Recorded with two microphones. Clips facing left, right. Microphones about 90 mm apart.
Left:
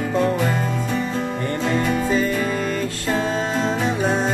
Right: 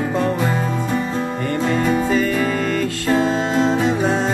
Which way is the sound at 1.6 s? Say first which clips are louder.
Right 3 dB; 5° right (ahead or behind).